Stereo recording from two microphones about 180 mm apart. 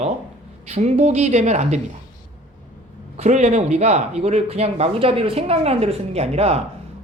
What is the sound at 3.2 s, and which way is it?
Speech, 40° right (ahead or behind).